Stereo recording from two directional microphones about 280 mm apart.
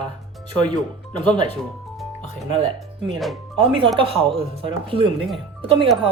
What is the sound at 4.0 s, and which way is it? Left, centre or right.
Speech, centre.